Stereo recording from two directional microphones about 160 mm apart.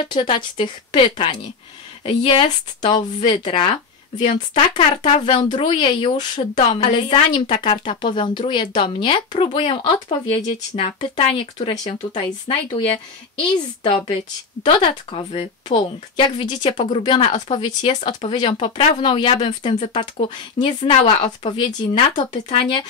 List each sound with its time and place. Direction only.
0.0 s a woman's voice: 30° left (ahead or behind)
4.7 s a woman's voice: 35° left (ahead or behind)